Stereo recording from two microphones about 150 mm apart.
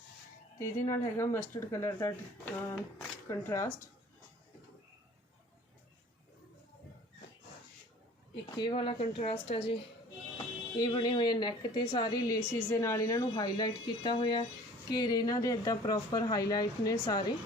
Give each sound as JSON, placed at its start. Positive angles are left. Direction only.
{"t": 0.9, "sound": "speech", "side_deg": 20}
{"t": 8.5, "sound": "speech", "side_deg": 30}
{"t": 10.3, "sound": "speech", "side_deg": 25}